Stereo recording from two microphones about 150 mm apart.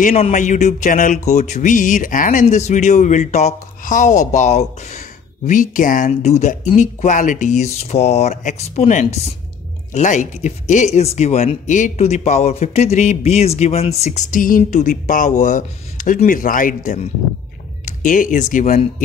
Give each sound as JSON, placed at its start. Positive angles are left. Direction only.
{"t": 0.1, "sound": "speech", "side_deg": 50}
{"t": 2.4, "sound": "speech", "side_deg": 45}
{"t": 5.5, "sound": "speech", "side_deg": 60}